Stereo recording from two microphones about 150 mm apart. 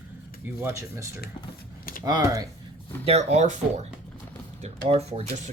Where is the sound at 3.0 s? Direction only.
45° right (ahead or behind).